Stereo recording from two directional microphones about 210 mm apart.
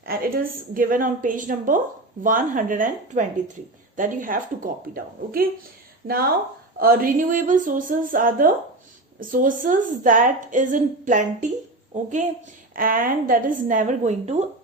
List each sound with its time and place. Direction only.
0.0 s a woman's voice: 45° right (ahead or behind)
12.7 s a woman's voice: 40° right (ahead or behind)